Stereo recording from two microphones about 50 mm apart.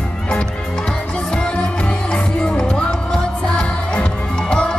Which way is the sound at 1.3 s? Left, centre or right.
Centre.